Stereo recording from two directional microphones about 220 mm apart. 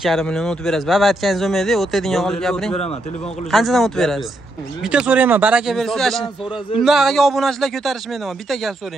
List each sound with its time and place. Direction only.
0.0 s speech: centre (ahead or behind)
2.7 s a man's voice: 30° left (ahead or behind)
3.5 s speech: centre (ahead or behind)